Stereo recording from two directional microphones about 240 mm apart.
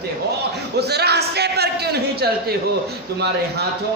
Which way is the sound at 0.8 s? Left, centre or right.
Right.